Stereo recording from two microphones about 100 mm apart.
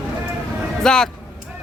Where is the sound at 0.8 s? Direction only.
5° left (ahead or behind).